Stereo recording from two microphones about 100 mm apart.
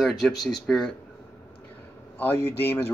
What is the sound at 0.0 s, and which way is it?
Speech, centre (ahead or behind).